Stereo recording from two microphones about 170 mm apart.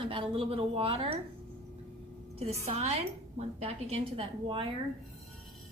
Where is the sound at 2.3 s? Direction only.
35° right (ahead or behind).